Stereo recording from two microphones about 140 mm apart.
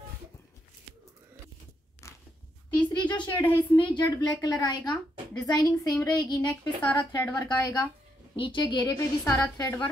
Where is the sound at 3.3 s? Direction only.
15° left (ahead or behind).